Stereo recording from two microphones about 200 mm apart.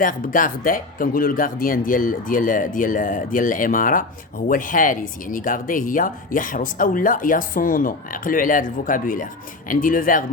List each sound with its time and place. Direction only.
0.0 s speech: 45° left (ahead or behind)